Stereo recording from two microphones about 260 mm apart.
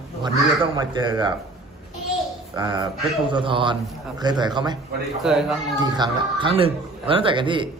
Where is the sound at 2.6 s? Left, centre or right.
Centre.